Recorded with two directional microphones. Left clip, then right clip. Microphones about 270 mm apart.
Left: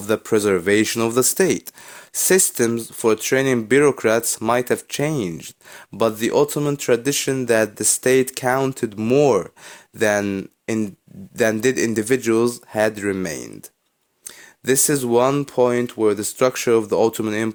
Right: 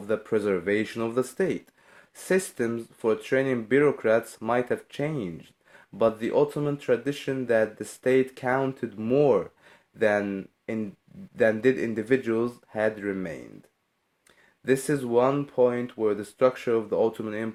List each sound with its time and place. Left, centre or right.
0.0 s speech: left
14.6 s speech: left